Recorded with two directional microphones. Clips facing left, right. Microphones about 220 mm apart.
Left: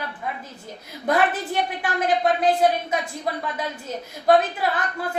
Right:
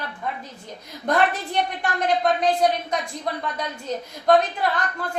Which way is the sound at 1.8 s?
5° left (ahead or behind).